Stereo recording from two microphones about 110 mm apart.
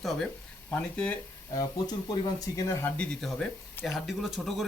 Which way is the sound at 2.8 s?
15° left (ahead or behind).